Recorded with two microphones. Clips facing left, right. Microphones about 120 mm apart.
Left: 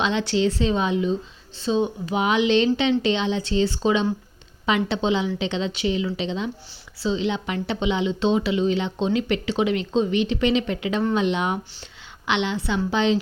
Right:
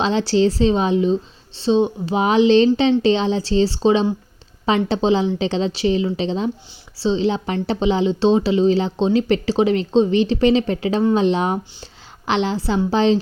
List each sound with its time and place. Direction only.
0.0 s speech: 35° right (ahead or behind)